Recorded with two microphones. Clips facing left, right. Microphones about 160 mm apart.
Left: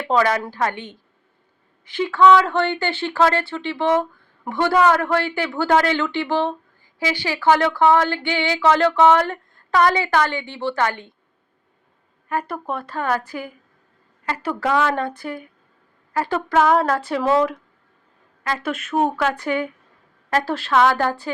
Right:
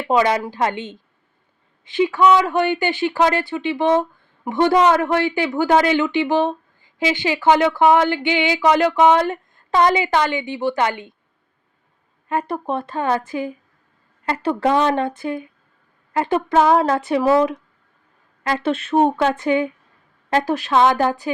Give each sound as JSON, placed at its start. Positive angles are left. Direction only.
{"t": 0.1, "sound": "a woman's voice", "side_deg": -20}
{"t": 12.3, "sound": "a woman's voice", "side_deg": -25}
{"t": 18.4, "sound": "a woman's voice", "side_deg": -30}